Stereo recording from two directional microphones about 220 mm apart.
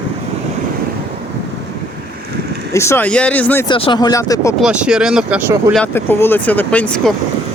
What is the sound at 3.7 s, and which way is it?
Speech, 20° left (ahead or behind).